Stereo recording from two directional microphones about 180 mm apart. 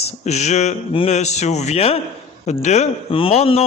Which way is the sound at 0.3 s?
40° left (ahead or behind).